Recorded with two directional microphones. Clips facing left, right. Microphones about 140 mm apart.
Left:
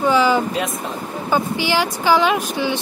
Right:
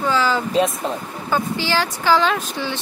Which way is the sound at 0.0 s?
15° left (ahead or behind).